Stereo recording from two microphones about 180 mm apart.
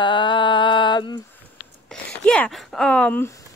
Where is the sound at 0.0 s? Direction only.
25° left (ahead or behind).